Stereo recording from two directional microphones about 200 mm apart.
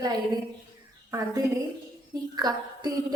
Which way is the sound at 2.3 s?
20° right (ahead or behind).